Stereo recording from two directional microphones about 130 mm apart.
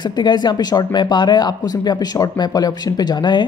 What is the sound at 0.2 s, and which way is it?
Speech, 35° left (ahead or behind).